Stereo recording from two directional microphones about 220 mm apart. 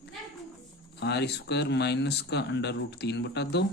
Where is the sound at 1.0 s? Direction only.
50° left (ahead or behind).